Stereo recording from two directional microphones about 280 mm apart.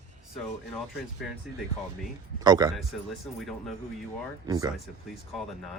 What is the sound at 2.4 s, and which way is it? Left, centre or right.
Speech, centre.